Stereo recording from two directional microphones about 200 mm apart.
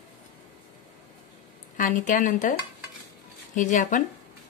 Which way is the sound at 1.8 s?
40° left (ahead or behind).